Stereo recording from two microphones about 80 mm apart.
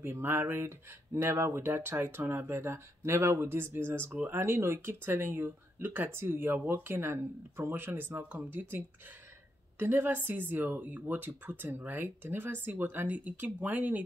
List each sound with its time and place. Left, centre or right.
0.0 s speech: right